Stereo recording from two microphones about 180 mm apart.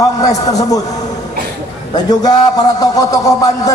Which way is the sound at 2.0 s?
20° left (ahead or behind).